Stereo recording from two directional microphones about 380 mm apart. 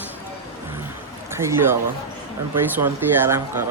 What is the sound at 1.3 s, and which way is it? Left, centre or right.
A man's voice, centre.